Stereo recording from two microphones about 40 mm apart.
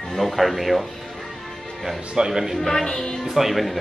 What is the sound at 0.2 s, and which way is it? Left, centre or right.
Speech, centre.